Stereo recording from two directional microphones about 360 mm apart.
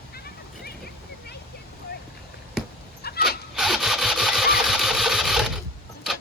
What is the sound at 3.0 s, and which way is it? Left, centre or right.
Dog, left.